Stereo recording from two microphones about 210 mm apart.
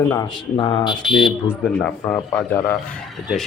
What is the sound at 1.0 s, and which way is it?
A man's voice, centre (ahead or behind).